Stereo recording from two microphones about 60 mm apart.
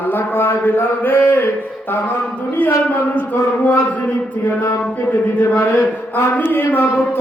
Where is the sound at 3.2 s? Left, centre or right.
Left.